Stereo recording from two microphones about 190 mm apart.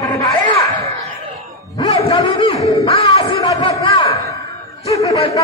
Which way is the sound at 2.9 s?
25° left (ahead or behind).